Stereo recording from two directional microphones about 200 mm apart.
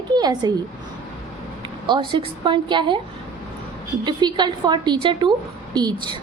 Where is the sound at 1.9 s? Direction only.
25° right (ahead or behind).